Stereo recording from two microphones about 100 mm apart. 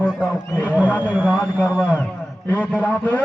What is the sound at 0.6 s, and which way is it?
A man's voice, 15° right (ahead or behind).